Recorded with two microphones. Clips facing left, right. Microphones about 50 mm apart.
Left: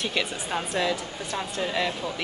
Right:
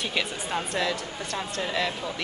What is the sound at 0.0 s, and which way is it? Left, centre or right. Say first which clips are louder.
A woman's voice: left 1 dB; centre.